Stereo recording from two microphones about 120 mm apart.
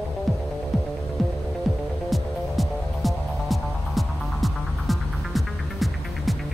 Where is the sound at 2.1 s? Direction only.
Centre (ahead or behind).